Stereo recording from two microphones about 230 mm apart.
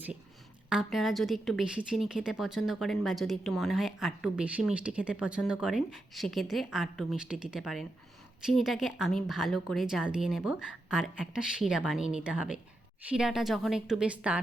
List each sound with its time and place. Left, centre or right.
0.7 s a woman's voice: centre